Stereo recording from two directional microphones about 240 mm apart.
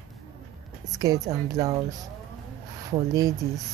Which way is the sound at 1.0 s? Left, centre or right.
Centre.